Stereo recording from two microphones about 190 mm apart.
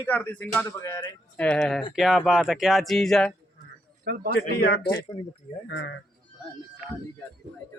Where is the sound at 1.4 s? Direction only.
5° left (ahead or behind).